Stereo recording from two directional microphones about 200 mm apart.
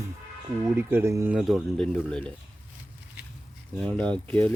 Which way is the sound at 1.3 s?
Centre (ahead or behind).